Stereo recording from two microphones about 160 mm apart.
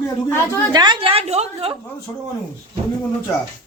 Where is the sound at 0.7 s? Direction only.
25° right (ahead or behind).